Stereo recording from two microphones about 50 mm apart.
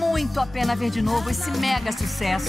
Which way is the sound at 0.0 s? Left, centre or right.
Centre.